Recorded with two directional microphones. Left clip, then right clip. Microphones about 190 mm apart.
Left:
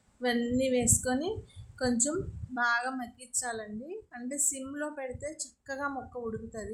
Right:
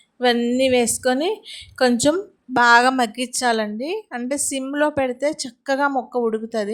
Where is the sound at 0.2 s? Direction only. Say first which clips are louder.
Right 12 dB; 45° right (ahead or behind).